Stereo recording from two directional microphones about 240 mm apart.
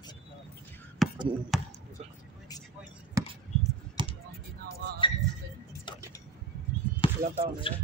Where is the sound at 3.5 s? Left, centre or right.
Left.